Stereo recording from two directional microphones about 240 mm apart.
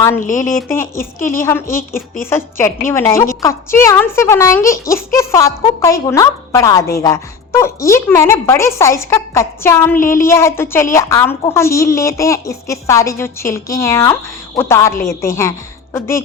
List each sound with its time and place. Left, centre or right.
0.2 s a woman's voice: left
1.2 s a woman's voice: centre
1.7 s a woman's voice: left
2.3 s a woman's voice: centre